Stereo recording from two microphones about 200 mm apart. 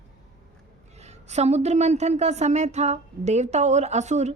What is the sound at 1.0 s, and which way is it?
A woman's voice, 35° right (ahead or behind).